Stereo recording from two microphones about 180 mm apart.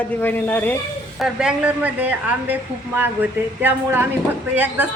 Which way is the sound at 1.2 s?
5° right (ahead or behind).